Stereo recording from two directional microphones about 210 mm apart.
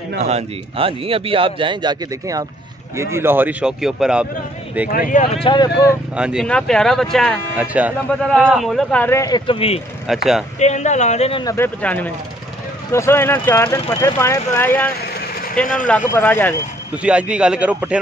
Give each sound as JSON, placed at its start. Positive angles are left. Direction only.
{"t": 0.2, "sound": "a man's voice", "side_deg": -30}
{"t": 4.8, "sound": "a man's voice", "side_deg": 40}
{"t": 5.3, "sound": "speech", "side_deg": 25}
{"t": 6.1, "sound": "speech", "side_deg": -5}
{"t": 10.0, "sound": "speech", "side_deg": 0}
{"t": 10.6, "sound": "a man's voice", "side_deg": 35}
{"t": 11.4, "sound": "speech", "side_deg": 10}
{"t": 16.9, "sound": "speech", "side_deg": -5}